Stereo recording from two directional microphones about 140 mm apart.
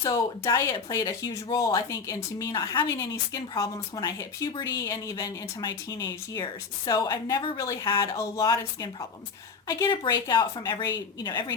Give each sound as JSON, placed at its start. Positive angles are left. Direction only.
{"t": 0.0, "sound": "a woman's voice", "side_deg": 25}